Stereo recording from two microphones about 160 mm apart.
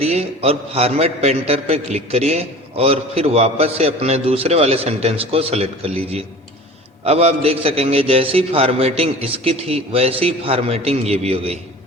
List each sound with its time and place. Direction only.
0.0 s a man's voice: 40° right (ahead or behind)